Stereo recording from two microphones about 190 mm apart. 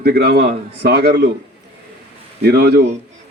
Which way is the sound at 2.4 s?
55° right (ahead or behind).